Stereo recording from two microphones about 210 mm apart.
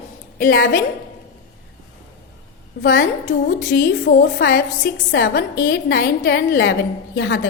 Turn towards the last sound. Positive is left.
turn(degrees=50)  # may be behind; listen again after turning